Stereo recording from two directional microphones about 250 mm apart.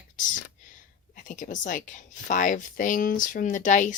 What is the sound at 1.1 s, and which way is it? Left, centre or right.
A woman's voice, left.